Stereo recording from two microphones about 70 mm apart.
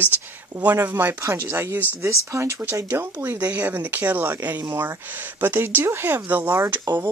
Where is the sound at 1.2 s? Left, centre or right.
Right.